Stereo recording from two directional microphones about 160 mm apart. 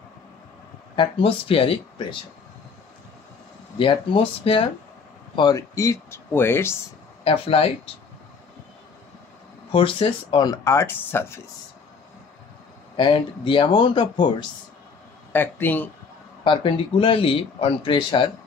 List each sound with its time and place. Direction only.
0.9 s speech: 35° left (ahead or behind)
3.7 s speech: 30° left (ahead or behind); by 6.8 s 15° left (ahead or behind)
7.2 s speech: 35° left (ahead or behind)
9.7 s speech: 35° left (ahead or behind); by 11.4 s 15° left (ahead or behind)
12.9 s speech: 30° left (ahead or behind)
15.3 s speech: 10° left (ahead or behind)
16.4 s speech: 35° left (ahead or behind)